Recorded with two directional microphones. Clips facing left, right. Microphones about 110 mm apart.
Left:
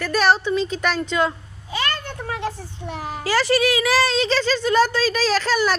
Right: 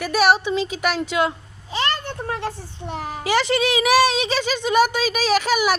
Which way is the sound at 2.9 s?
20° right (ahead or behind).